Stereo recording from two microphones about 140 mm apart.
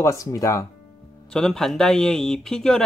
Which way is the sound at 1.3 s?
5° left (ahead or behind).